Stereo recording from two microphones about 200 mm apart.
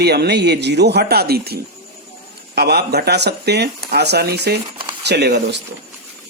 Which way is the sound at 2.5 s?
55° right (ahead or behind).